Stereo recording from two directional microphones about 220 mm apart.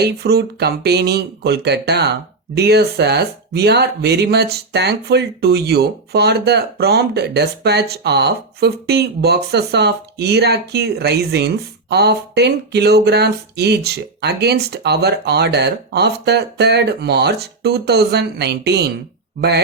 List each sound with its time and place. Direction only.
0.0 s speech: 45° right (ahead or behind)